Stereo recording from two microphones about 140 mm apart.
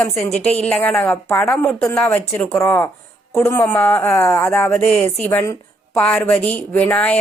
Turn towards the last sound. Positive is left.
turn(degrees=5)  # may be behind; listen again after turning